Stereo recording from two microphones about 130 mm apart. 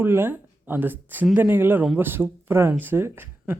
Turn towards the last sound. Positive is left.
turn(degrees=-15)  # may be behind; listen again after turning